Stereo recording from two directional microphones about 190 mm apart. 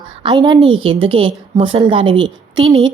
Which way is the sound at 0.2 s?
25° right (ahead or behind).